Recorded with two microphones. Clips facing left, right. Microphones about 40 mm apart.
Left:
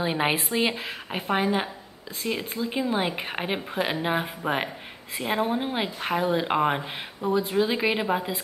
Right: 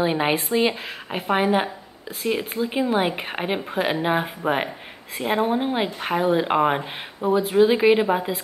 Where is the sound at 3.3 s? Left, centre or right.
Centre.